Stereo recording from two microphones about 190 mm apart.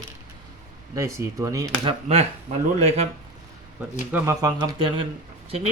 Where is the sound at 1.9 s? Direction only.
30° right (ahead or behind).